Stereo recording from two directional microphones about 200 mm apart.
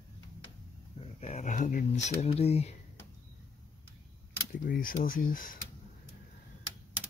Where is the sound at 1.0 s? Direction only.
35° left (ahead or behind).